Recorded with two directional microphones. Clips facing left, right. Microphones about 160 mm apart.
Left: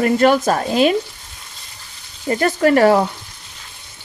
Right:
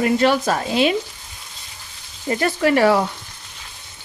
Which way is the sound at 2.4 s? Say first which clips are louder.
Left 3 dB; 45° left (ahead or behind).